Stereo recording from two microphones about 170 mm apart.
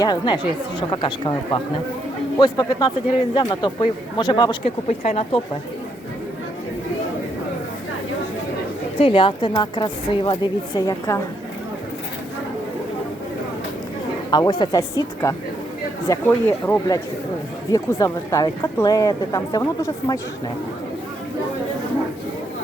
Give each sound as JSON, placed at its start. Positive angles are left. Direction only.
{"t": 0.0, "sound": "speech", "side_deg": 25}
{"t": 4.6, "sound": "speech", "side_deg": 40}
{"t": 9.0, "sound": "speech", "side_deg": 30}
{"t": 14.3, "sound": "speech", "side_deg": 25}